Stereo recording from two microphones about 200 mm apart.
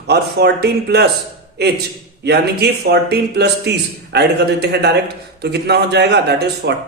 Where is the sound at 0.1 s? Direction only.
55° right (ahead or behind).